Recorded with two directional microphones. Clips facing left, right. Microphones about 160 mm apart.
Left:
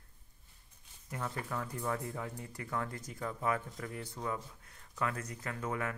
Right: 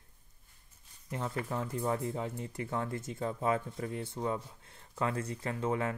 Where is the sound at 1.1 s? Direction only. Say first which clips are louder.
Right 3 dB; 25° right (ahead or behind).